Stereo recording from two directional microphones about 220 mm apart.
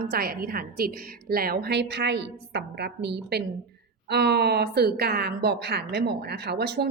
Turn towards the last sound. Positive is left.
turn(degrees=-45)  # may be behind; listen again after turning